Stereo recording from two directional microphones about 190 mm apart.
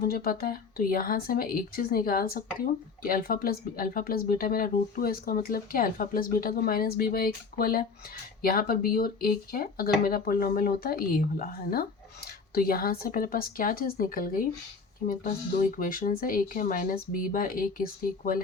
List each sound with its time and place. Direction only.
0.0 s speech: 50° left (ahead or behind)